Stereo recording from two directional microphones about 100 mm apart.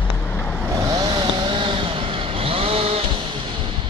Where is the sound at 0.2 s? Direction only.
25° left (ahead or behind).